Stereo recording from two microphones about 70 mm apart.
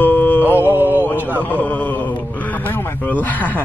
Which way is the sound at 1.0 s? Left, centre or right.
Left.